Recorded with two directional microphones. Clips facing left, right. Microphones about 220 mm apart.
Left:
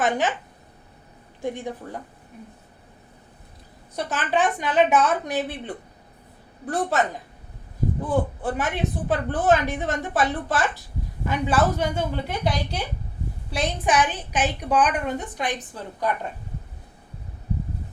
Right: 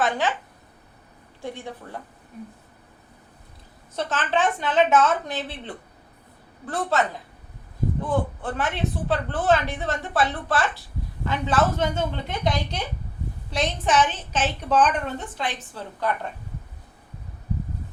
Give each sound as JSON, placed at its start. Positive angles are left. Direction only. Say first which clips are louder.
{"t": 0.0, "sound": "a woman's voice", "louder": "left 1 dB", "side_deg": 20}
{"t": 1.4, "sound": "a woman's voice", "louder": "left 5 dB", "side_deg": 15}
{"t": 3.9, "sound": "a woman's voice", "louder": "left 1 dB", "side_deg": 10}
{"t": 8.1, "sound": "a woman's voice", "louder": "left 3 dB", "side_deg": 15}